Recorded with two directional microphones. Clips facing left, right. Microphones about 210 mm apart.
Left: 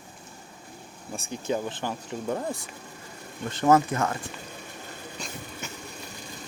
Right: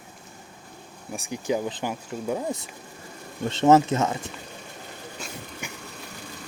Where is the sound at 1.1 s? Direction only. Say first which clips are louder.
Right 2 dB; 15° right (ahead or behind).